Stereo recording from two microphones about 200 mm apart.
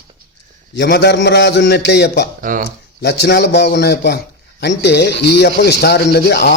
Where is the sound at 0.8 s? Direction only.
60° left (ahead or behind).